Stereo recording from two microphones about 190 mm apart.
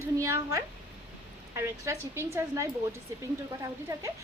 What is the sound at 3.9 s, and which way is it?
Speech, 15° right (ahead or behind).